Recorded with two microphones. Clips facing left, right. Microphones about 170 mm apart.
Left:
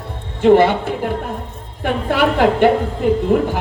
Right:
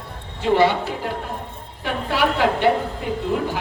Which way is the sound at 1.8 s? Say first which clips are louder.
Left 5 dB; 50° left (ahead or behind).